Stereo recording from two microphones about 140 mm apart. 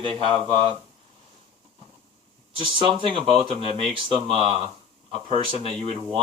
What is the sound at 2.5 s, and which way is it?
Speech, 40° right (ahead or behind).